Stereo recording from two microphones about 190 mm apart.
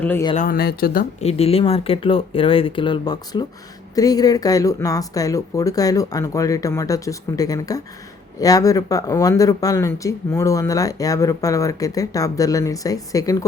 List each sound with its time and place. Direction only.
0.0 s speech: 10° left (ahead or behind)
0.3 s speech: 50° left (ahead or behind)
1.2 s speech: 30° left (ahead or behind)